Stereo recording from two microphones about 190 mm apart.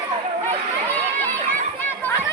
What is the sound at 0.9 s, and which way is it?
Run, 10° left (ahead or behind).